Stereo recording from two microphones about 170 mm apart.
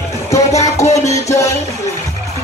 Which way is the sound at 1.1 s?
15° left (ahead or behind).